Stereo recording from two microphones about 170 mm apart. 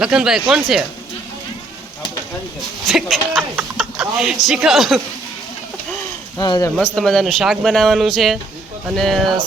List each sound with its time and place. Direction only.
0.0 s speech: 5° right (ahead or behind)
2.8 s speech: centre (ahead or behind)
6.3 s speech: 20° left (ahead or behind)
6.7 s speech: 5° left (ahead or behind)